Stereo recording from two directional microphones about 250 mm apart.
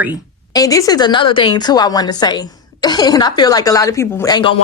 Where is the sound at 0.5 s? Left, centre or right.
Centre.